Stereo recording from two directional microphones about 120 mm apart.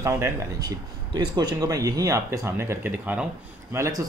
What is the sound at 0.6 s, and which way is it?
Speech, 35° right (ahead or behind).